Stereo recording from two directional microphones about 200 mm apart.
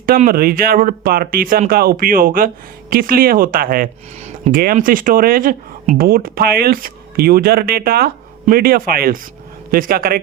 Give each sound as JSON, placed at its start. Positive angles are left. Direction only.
{"t": 0.0, "sound": "speech", "side_deg": -45}